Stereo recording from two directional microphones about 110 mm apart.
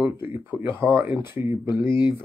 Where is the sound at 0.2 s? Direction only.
20° right (ahead or behind).